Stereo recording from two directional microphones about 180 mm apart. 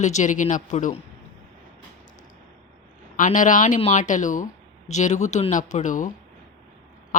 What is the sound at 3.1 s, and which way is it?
Speech, 45° left (ahead or behind).